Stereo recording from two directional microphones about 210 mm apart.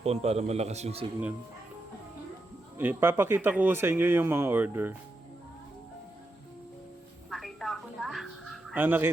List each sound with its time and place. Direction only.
0.0 s a man's voice: 30° right (ahead or behind)
2.7 s speech: 10° right (ahead or behind)
7.3 s music: centre (ahead or behind)